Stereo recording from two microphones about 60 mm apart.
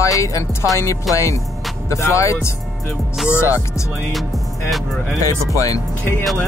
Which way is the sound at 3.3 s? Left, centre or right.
Left.